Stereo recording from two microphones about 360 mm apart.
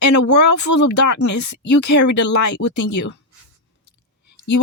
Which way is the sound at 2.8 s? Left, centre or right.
Left.